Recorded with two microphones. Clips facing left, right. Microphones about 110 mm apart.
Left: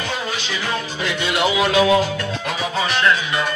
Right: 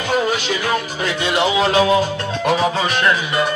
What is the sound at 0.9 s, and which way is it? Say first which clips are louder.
Music: right 3 dB; 30° right (ahead or behind).